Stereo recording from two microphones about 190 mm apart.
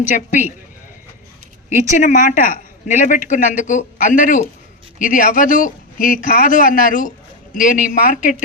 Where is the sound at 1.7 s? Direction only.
40° left (ahead or behind).